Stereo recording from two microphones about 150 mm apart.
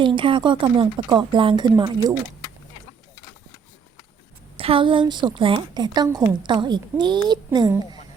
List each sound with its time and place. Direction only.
0.0 s speech: 35° right (ahead or behind)
4.5 s a woman's voice: 40° right (ahead or behind)